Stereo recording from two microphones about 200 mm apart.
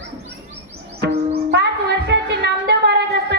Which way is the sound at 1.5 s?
60° right (ahead or behind).